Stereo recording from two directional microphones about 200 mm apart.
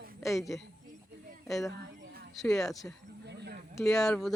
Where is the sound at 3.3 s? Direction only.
55° right (ahead or behind).